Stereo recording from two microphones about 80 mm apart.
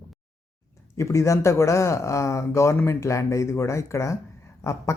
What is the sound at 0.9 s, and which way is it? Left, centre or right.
Speech, left.